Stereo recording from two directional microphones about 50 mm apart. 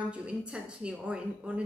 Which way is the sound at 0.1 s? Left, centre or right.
Right.